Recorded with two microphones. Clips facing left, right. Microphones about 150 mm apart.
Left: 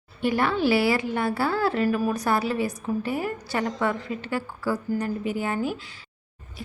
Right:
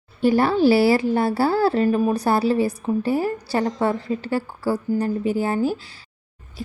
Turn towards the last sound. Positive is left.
turn(degrees=-35)  # may be behind; listen again after turning